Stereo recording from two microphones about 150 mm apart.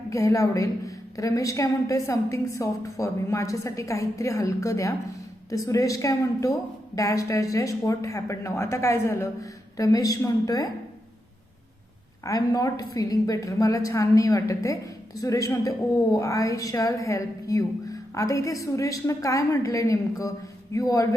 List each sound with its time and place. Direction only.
0.1 s a woman's voice: 20° left (ahead or behind)
12.2 s a woman's voice: 25° left (ahead or behind)